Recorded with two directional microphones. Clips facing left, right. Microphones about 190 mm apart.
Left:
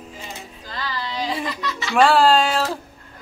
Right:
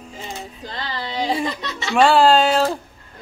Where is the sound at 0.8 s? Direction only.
25° right (ahead or behind).